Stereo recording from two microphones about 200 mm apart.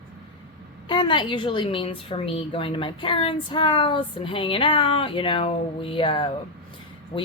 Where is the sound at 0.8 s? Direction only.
25° left (ahead or behind).